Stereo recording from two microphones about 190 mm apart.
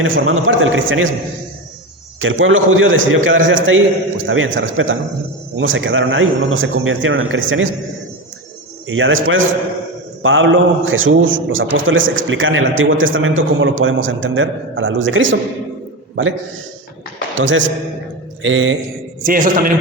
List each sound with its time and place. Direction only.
0.0 s a man's voice: 90° right
2.2 s a man's voice: 90° right
8.9 s a man's voice: 90° right
10.2 s a man's voice: 80° right
17.3 s a man's voice: 80° right
18.4 s a man's voice: 90° right
19.2 s a man's voice: 50° right (ahead or behind)